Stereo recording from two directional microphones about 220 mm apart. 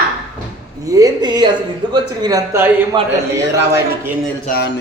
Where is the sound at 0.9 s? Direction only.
15° right (ahead or behind).